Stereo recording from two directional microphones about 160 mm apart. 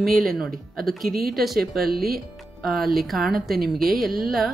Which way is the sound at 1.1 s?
70° right (ahead or behind).